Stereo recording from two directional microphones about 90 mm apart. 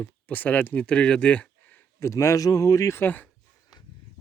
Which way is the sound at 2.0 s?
35° left (ahead or behind).